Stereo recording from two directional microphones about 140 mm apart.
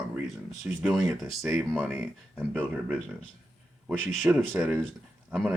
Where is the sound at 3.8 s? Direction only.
5° left (ahead or behind).